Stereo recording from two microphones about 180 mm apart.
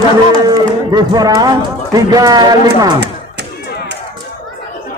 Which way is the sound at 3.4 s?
70° right (ahead or behind).